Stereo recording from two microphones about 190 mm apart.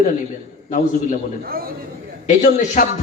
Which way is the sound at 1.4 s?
50° right (ahead or behind).